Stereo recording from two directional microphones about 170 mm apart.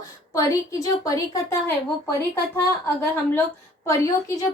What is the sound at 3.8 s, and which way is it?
Speech, 20° left (ahead or behind).